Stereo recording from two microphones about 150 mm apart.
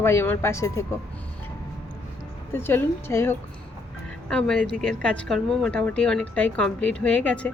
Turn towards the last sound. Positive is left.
turn(degrees=10)  # may be behind; listen again after turning